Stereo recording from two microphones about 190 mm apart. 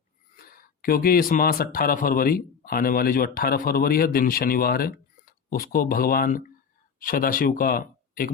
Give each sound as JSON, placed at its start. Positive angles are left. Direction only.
{"t": 0.4, "sound": "speech", "side_deg": 50}